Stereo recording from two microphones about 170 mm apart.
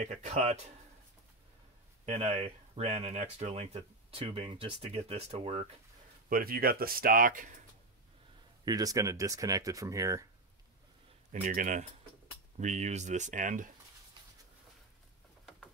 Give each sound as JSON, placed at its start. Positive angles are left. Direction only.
{"t": 0.0, "sound": "speech", "side_deg": -45}
{"t": 2.0, "sound": "speech", "side_deg": -40}
{"t": 6.2, "sound": "speech", "side_deg": -60}
{"t": 8.6, "sound": "speech", "side_deg": -20}
{"t": 11.4, "sound": "speech", "side_deg": -50}